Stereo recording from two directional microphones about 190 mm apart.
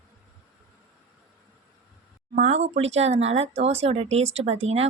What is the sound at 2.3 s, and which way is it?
Speech, 35° right (ahead or behind).